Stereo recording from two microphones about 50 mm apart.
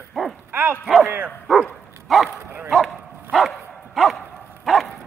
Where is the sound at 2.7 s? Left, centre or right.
Centre.